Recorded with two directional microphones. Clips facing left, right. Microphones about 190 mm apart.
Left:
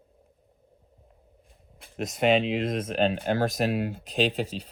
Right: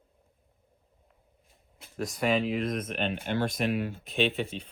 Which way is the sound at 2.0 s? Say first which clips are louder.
Left 4 dB; 25° left (ahead or behind).